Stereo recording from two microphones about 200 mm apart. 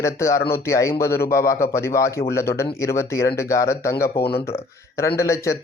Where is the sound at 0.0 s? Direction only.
15° left (ahead or behind).